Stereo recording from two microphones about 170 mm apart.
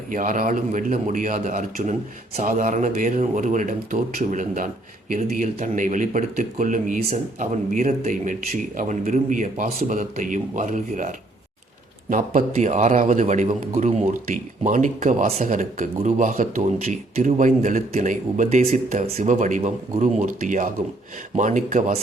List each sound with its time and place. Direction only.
0.1 s speech: 50° right (ahead or behind)